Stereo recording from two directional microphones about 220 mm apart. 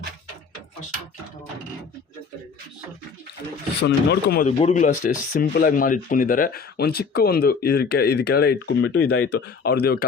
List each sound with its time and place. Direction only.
3.8 s speech: 50° left (ahead or behind)
4.6 s speech: 30° left (ahead or behind)